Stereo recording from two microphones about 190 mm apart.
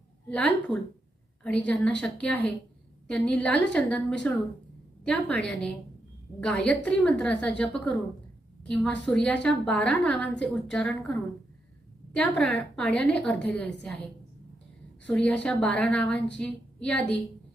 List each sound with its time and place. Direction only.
0.3 s a woman's voice: 5° left (ahead or behind)
15.0 s a woman's voice: 5° left (ahead or behind)